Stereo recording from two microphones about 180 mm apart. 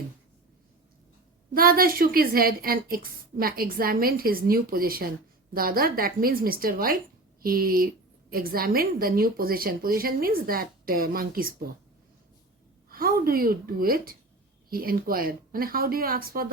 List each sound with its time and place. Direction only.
1.5 s a woman's voice: 55° right (ahead or behind)
12.9 s a woman's voice: 55° right (ahead or behind)